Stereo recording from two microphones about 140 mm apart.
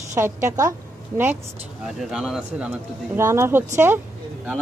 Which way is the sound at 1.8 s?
5° right (ahead or behind).